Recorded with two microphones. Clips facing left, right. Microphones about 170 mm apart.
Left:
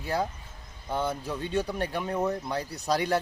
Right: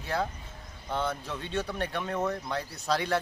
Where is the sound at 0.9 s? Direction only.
15° left (ahead or behind).